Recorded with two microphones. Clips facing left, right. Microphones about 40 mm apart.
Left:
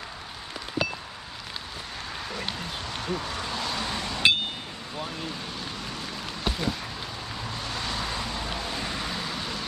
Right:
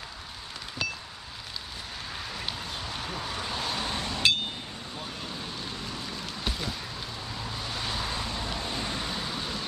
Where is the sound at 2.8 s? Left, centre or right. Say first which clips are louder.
Left 6 dB; centre.